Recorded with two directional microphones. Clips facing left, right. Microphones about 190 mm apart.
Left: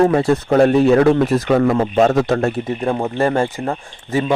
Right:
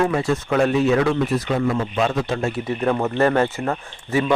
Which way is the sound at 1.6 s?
55° left (ahead or behind).